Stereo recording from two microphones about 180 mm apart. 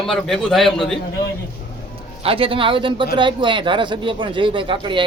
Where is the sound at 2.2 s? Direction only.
30° right (ahead or behind).